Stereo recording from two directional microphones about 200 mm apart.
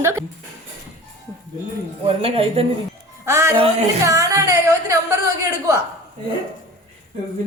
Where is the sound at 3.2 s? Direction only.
15° right (ahead or behind).